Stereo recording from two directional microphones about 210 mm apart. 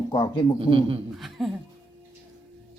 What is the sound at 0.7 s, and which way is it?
Speech, 25° right (ahead or behind).